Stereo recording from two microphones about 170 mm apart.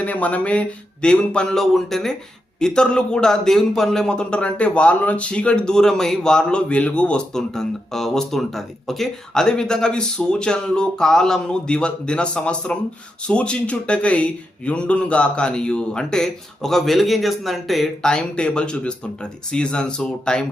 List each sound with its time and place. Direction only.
0.0 s a man's voice: 10° left (ahead or behind)